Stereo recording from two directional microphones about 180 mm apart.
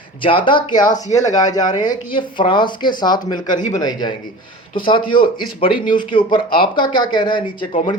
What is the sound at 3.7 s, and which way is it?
A man's voice, 25° left (ahead or behind).